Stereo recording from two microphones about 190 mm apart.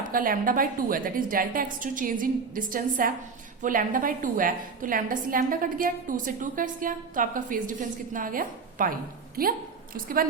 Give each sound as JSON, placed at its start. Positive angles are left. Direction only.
{"t": 0.1, "sound": "a woman's voice", "side_deg": -50}